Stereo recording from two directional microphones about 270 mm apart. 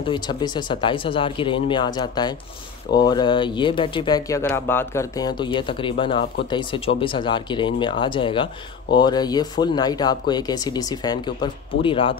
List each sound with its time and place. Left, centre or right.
0.0 s speech: centre